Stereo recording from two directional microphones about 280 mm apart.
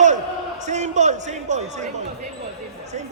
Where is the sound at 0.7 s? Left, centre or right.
Right.